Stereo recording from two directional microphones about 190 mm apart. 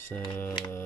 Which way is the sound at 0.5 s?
20° left (ahead or behind).